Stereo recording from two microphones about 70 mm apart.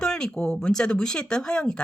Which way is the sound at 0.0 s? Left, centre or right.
Centre.